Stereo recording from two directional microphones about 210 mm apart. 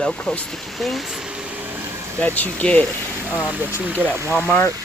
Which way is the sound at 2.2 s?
10° left (ahead or behind).